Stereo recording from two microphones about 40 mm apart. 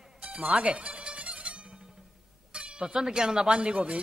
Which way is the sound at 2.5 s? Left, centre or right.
Right.